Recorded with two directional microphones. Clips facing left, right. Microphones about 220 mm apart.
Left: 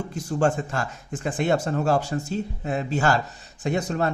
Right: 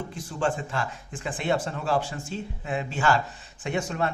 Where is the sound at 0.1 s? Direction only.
45° left (ahead or behind).